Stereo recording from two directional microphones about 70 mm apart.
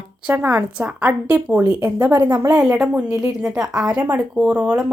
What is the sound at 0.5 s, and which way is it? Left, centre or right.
Speech, right.